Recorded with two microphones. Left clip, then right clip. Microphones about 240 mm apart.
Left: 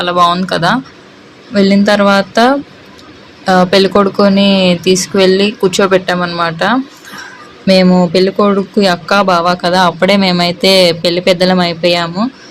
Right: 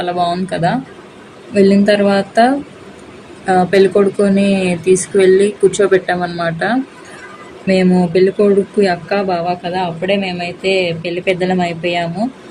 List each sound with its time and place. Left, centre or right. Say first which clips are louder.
0.0 s speech: left 6 dB; centre